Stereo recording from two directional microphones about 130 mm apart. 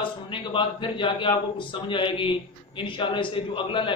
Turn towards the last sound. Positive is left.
turn(degrees=40)  # may be behind; listen again after turning